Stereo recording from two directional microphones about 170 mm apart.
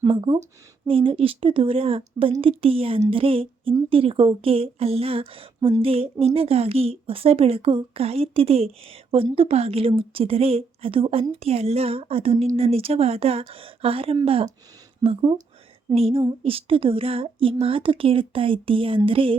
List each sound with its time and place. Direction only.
0.1 s speech: 30° right (ahead or behind)
5.5 s speech: 20° right (ahead or behind)
5.8 s speech: 35° right (ahead or behind)